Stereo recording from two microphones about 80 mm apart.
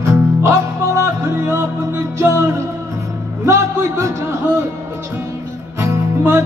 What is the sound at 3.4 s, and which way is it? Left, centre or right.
Music, right.